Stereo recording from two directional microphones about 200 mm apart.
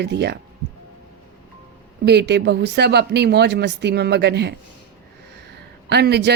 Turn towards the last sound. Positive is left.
turn(degrees=-55)  # may be behind; listen again after turning